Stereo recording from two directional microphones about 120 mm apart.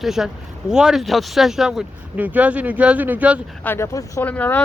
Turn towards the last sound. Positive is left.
turn(degrees=15)  # may be behind; listen again after turning